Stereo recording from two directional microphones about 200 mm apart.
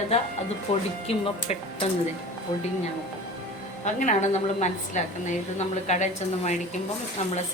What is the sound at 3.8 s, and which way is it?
A woman's voice, 35° left (ahead or behind).